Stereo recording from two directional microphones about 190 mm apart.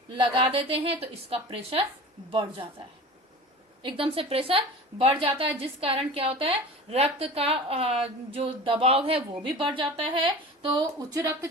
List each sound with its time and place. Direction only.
0.1 s a woman's voice: 25° right (ahead or behind)
3.8 s a woman's voice: 30° right (ahead or behind)